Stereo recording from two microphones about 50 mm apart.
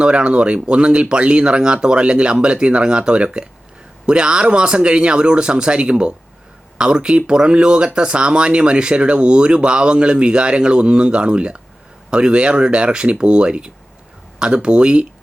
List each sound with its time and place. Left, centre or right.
0.0 s speech: right